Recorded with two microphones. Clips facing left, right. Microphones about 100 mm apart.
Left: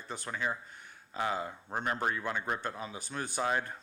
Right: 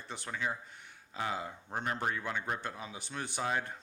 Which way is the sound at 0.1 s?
45° left (ahead or behind).